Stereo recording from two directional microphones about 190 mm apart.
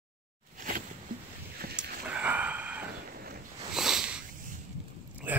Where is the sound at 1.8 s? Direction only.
5° right (ahead or behind).